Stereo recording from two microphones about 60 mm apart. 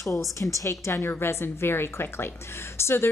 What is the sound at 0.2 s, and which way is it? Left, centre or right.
Speech, left.